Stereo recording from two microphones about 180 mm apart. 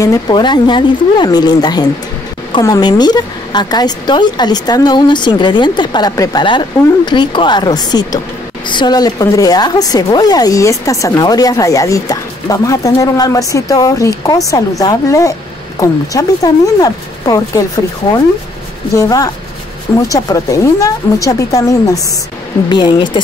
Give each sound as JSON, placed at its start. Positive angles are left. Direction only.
{"t": 0.0, "sound": "a woman's voice", "side_deg": 25}
{"t": 18.9, "sound": "a woman's voice", "side_deg": 20}